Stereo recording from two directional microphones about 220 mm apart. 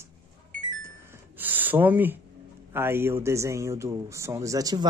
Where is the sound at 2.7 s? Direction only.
10° right (ahead or behind).